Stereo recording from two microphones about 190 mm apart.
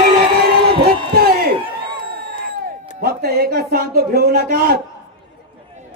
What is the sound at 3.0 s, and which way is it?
Music, 55° right (ahead or behind).